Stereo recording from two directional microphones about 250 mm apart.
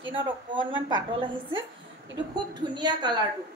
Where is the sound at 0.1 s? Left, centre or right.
Centre.